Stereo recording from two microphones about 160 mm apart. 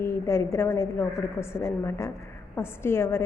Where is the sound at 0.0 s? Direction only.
15° left (ahead or behind).